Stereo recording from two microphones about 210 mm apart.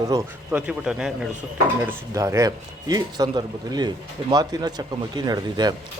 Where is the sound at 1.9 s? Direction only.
15° right (ahead or behind).